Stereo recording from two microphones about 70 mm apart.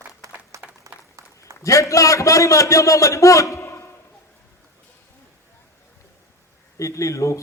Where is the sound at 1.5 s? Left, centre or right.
Right.